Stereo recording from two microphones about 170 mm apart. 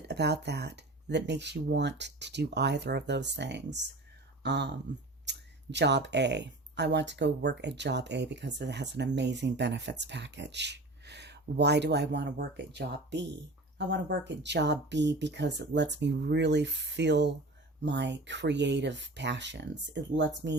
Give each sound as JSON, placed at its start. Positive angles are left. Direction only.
{"t": 0.1, "sound": "speech", "side_deg": -75}